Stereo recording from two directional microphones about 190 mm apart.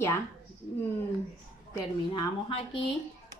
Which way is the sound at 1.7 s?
25° left (ahead or behind).